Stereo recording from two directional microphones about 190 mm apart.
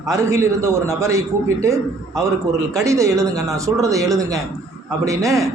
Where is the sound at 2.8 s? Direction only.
15° right (ahead or behind).